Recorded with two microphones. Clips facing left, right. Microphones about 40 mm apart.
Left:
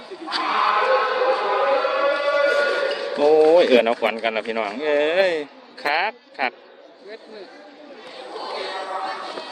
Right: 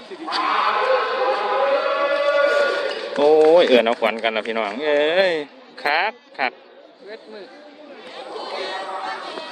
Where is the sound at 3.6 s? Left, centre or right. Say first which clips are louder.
Right 1 dB; right.